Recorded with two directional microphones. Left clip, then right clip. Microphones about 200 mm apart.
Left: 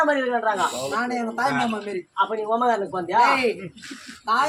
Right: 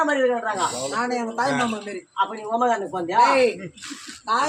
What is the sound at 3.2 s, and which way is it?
Speech, 20° left (ahead or behind).